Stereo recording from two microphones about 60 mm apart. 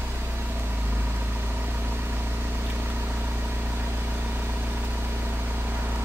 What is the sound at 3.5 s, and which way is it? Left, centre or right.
Vehicle, right.